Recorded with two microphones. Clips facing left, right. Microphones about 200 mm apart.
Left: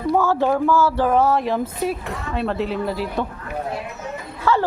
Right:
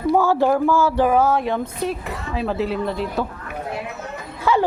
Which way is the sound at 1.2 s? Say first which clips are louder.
Even; centre (ahead or behind).